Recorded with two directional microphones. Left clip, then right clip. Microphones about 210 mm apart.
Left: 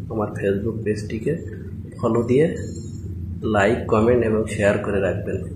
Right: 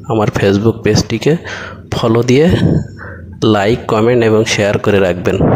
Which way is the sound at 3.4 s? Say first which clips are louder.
Right 7 dB; 50° right (ahead or behind).